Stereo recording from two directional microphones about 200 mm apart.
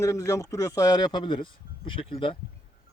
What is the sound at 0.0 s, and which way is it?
Speech, 15° left (ahead or behind).